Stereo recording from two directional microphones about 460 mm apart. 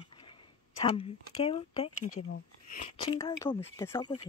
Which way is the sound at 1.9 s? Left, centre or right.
Left.